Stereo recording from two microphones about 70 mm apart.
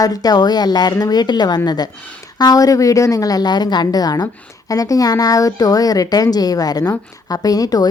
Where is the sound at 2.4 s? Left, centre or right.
Left.